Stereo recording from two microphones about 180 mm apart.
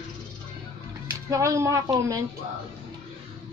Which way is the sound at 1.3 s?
15° right (ahead or behind).